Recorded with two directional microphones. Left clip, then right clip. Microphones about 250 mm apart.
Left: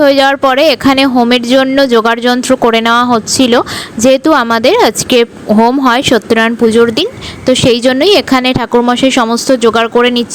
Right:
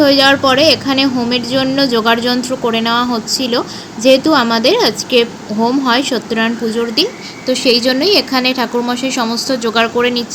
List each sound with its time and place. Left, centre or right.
0.0 s a woman's voice: left